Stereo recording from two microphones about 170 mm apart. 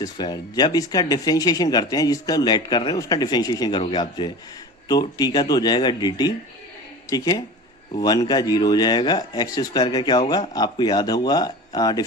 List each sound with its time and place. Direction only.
0.0 s speech: 25° left (ahead or behind)